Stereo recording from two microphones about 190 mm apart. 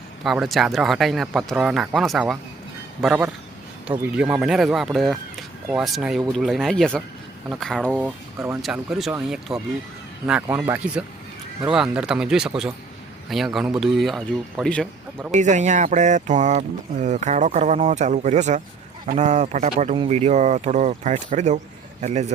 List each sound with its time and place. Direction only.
0.3 s speech: centre (ahead or behind)
15.3 s speech: 40° right (ahead or behind)